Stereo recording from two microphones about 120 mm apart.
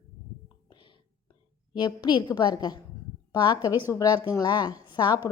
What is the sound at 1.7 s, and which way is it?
A woman's voice, 40° left (ahead or behind).